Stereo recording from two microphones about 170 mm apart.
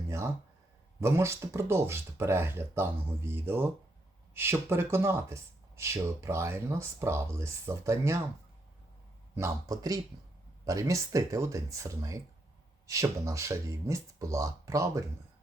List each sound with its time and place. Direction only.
1.0 s speech: 15° right (ahead or behind)
9.3 s speech: 20° right (ahead or behind)